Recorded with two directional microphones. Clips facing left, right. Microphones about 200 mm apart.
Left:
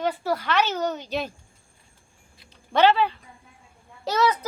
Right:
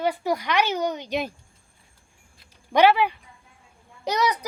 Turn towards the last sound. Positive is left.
turn(degrees=-15)  # may be behind; listen again after turning